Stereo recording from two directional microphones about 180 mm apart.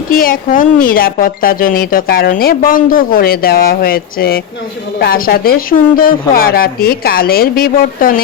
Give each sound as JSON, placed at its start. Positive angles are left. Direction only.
{"t": 0.1, "sound": "speech", "side_deg": 50}